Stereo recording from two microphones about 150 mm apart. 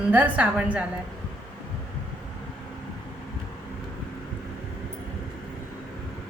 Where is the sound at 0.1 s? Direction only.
10° right (ahead or behind).